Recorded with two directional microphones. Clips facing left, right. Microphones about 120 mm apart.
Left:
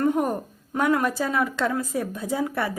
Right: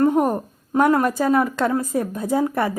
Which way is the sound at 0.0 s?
45° right (ahead or behind).